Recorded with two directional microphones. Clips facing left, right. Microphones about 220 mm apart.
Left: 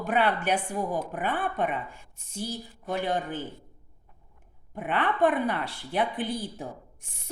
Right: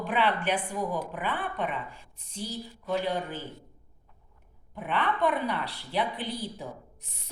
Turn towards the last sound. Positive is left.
turn(degrees=45)  # may be behind; listen again after turning